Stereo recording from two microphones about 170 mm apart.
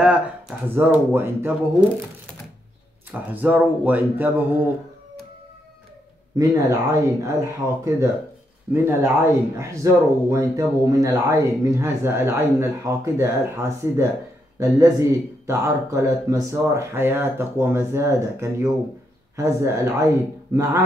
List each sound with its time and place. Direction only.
0.7 s a man's voice: 10° right (ahead or behind)
3.1 s a man's voice: 10° right (ahead or behind)
6.3 s a man's voice: 20° right (ahead or behind)